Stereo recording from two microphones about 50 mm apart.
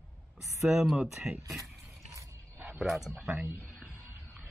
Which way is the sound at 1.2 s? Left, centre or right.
Right.